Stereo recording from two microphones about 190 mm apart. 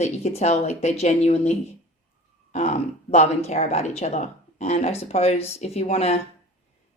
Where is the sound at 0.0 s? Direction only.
35° left (ahead or behind).